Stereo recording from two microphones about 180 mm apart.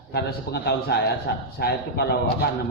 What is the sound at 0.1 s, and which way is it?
A man's voice, 65° left (ahead or behind).